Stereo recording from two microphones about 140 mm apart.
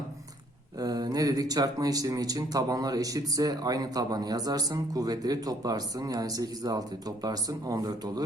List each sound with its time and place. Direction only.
0.8 s speech: 25° right (ahead or behind)